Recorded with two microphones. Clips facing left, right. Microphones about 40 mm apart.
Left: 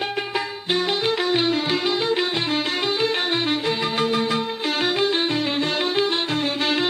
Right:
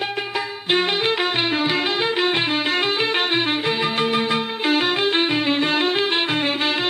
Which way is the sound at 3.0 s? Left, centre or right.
Right.